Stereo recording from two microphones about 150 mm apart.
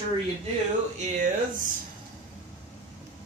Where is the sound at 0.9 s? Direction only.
60° right (ahead or behind).